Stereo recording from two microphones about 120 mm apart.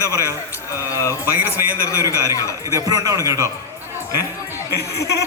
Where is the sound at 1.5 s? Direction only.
20° left (ahead or behind).